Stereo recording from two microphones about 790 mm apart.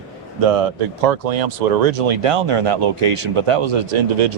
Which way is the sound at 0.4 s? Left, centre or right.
Right.